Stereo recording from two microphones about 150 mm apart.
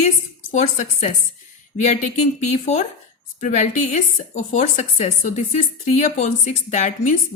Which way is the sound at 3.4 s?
55° left (ahead or behind).